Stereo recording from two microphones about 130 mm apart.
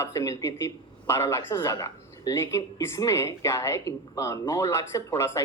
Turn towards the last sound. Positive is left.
turn(degrees=25)  # may be behind; listen again after turning